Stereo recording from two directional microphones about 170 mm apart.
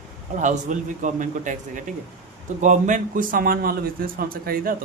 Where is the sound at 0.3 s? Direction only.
45° right (ahead or behind).